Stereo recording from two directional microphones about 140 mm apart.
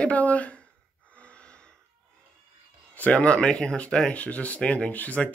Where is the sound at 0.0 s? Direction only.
10° left (ahead or behind).